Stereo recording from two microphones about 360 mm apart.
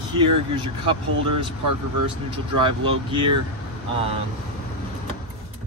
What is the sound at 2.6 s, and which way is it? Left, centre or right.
Speech, centre.